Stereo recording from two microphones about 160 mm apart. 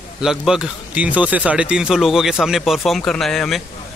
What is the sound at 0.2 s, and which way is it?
A man's voice, 5° right (ahead or behind).